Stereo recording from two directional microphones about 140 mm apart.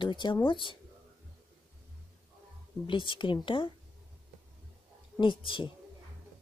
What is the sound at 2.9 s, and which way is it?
Speech, 35° left (ahead or behind).